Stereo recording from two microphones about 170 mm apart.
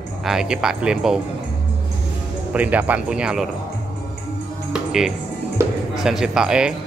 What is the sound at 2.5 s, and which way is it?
Speech, 10° right (ahead or behind).